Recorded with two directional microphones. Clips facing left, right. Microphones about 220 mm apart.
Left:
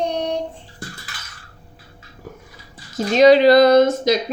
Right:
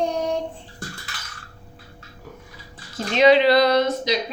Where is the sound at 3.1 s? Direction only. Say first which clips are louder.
Left 4 dB; 40° left (ahead or behind).